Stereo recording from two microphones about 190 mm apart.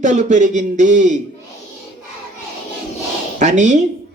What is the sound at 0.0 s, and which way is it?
Speech, 40° right (ahead or behind).